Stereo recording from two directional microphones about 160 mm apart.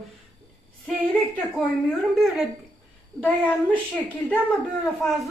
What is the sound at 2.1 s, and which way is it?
A woman's voice, centre (ahead or behind).